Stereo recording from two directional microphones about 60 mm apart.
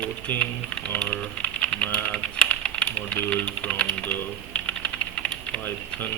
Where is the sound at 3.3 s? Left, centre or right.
Centre.